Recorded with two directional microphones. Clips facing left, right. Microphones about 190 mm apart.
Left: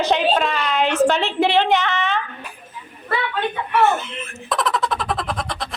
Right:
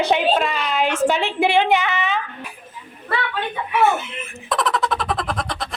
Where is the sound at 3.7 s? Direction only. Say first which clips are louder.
Even; 10° right (ahead or behind).